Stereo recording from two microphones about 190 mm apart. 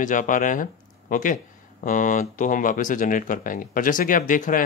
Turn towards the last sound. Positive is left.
turn(degrees=45)  # may be behind; listen again after turning